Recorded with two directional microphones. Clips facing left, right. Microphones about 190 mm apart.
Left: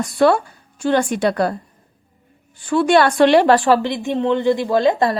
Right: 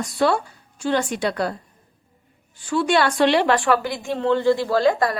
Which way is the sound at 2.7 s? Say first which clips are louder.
Left 5 dB; 55° left (ahead or behind).